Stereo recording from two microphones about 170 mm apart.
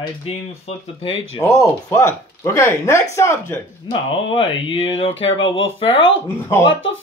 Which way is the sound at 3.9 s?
30° left (ahead or behind).